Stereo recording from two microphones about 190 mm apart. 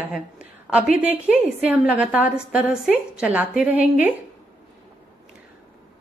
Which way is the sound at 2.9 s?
5° right (ahead or behind).